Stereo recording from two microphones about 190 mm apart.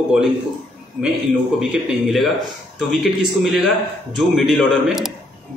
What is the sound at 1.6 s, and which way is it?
A man's voice, centre (ahead or behind).